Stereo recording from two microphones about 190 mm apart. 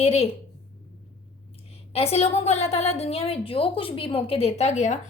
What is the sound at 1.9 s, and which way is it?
A woman's voice, 30° left (ahead or behind).